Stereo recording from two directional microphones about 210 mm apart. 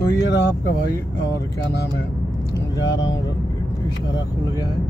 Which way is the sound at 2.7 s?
20° left (ahead or behind).